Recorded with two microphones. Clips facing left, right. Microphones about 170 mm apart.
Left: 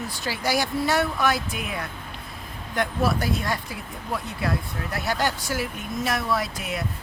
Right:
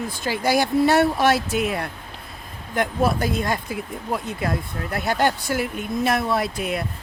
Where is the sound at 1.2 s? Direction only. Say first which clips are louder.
Right 6 dB; 80° right.